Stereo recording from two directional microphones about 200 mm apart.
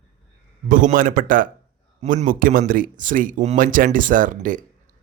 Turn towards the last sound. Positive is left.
turn(degrees=-40)  # may be behind; listen again after turning